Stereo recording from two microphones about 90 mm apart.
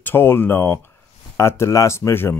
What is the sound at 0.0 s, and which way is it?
Speech, 25° left (ahead or behind).